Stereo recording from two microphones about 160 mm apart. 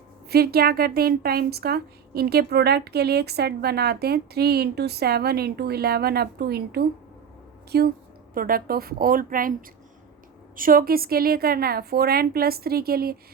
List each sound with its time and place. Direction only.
0.3 s a woman's voice: 75° right (ahead or behind)
8.4 s a woman's voice: 65° right (ahead or behind)